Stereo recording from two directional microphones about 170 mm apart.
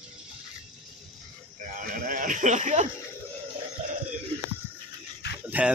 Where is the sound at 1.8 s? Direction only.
50° right (ahead or behind).